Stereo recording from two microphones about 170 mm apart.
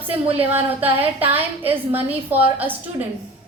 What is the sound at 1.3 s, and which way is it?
Speech, 35° right (ahead or behind).